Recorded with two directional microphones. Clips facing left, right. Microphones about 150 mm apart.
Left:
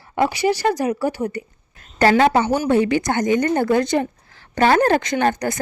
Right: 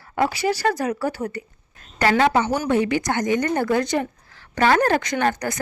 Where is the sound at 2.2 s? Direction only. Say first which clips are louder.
Left 3 dB; 30° left (ahead or behind).